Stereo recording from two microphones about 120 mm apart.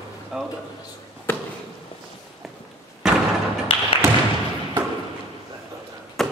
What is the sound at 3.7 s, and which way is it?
Tap, 45° left (ahead or behind).